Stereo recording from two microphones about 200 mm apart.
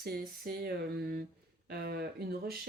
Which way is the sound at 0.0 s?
50° right (ahead or behind).